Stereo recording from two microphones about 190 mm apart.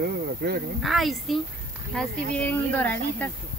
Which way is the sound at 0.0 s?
55° right (ahead or behind).